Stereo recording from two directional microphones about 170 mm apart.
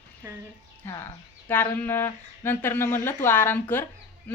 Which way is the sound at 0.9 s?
15° left (ahead or behind).